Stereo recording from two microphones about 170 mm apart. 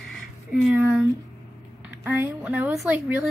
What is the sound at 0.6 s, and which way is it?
Speech, 10° right (ahead or behind).